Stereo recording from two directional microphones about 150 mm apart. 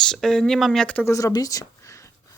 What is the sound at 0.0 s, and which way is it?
Speech, 5° left (ahead or behind).